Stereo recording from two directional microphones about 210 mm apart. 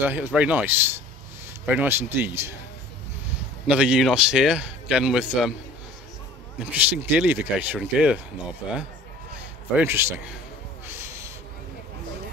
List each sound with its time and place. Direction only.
0.0 s speech: 10° right (ahead or behind)
3.6 s a man's voice: 5° right (ahead or behind)
6.6 s speech: 5° right (ahead or behind)
9.8 s speech: 10° right (ahead or behind)
10.9 s snort: 10° right (ahead or behind)